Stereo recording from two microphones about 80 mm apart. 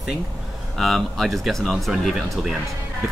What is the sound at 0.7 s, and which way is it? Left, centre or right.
Speech, centre.